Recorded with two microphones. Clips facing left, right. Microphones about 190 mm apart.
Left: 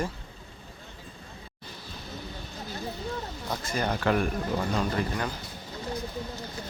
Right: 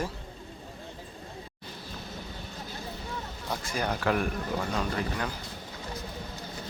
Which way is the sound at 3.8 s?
Centre (ahead or behind).